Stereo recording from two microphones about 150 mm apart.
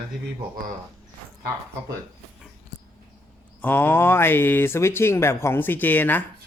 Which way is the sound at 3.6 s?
15° left (ahead or behind).